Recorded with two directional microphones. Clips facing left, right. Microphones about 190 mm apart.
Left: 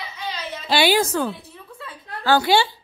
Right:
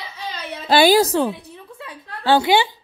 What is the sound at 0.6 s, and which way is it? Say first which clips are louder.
Speech: right 5 dB; 45° right (ahead or behind).